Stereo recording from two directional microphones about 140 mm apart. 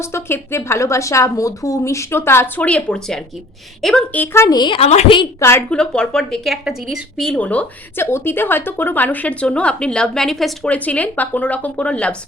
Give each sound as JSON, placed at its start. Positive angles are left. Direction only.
{"t": 0.0, "sound": "a woman's voice", "side_deg": 20}
{"t": 4.5, "sound": "a woman's voice", "side_deg": 35}
{"t": 4.9, "sound": "a woman's voice", "side_deg": 50}
{"t": 5.4, "sound": "a woman's voice", "side_deg": 15}
{"t": 5.7, "sound": "a woman's voice", "side_deg": 5}